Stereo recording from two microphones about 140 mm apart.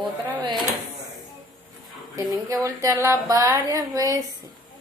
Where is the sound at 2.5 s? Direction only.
20° right (ahead or behind).